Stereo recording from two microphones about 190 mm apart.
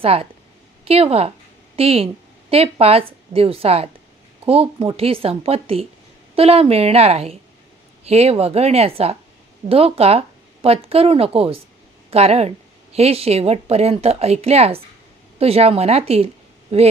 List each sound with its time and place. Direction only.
0.0 s speech: 30° right (ahead or behind)